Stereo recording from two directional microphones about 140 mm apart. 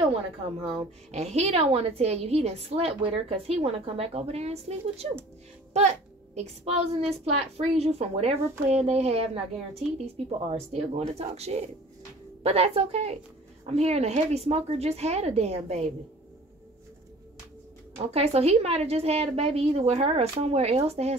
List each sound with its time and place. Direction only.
0.7 s a woman's voice: 45° right (ahead or behind)
6.3 s a woman's voice: 50° right (ahead or behind)
18.1 s a woman's voice: 45° right (ahead or behind)